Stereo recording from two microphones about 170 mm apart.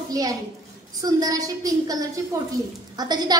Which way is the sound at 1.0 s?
20° right (ahead or behind).